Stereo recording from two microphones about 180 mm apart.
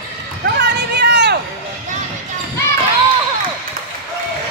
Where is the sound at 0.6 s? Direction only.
70° right (ahead or behind).